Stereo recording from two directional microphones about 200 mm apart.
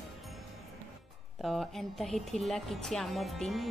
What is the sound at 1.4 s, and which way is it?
Speech, centre (ahead or behind).